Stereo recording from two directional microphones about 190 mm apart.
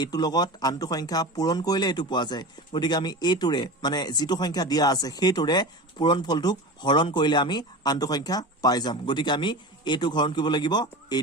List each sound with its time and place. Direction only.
0.0 s speech: 20° left (ahead or behind)